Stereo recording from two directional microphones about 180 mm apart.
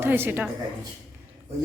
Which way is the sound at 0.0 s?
10° right (ahead or behind).